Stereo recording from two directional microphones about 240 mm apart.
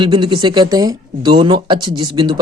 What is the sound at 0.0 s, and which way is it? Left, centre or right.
Speech, centre.